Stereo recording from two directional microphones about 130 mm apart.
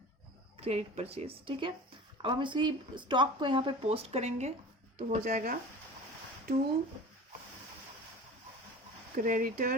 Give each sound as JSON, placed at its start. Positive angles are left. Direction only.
{"t": 0.6, "sound": "a woman's voice", "side_deg": -55}
{"t": 3.8, "sound": "speech", "side_deg": -55}
{"t": 4.9, "sound": "speech", "side_deg": -85}
{"t": 9.1, "sound": "speech", "side_deg": -90}